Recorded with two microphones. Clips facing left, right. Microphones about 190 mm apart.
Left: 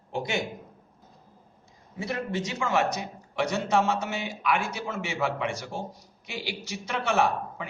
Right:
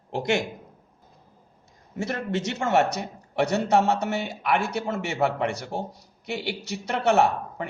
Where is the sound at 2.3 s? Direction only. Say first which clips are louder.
Right 6 dB; 65° right (ahead or behind).